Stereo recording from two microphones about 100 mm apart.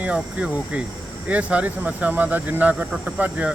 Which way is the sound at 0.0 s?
15° right (ahead or behind).